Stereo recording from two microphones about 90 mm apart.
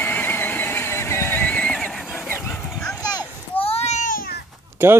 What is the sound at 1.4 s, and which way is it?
Neigh, 15° left (ahead or behind).